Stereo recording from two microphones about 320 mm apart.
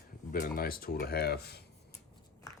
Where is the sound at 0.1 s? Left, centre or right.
Left.